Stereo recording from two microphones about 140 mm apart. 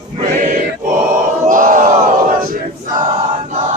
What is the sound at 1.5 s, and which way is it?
Battle cry, 70° right (ahead or behind).